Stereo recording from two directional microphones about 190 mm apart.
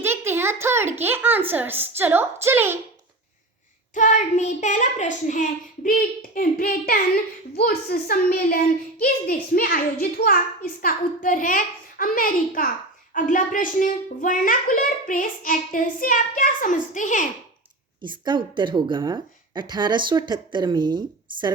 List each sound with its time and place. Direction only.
0.0 s a sound: 10° right (ahead or behind)
0.9 s a woman's voice: 10° right (ahead or behind)
3.9 s a child's voice: 40° left (ahead or behind)
18.0 s speech: 25° right (ahead or behind)